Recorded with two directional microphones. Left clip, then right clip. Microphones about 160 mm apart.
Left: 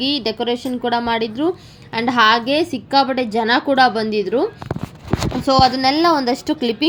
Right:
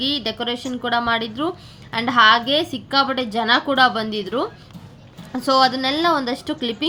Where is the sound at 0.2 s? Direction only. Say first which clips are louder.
Left 4 dB; 10° left (ahead or behind).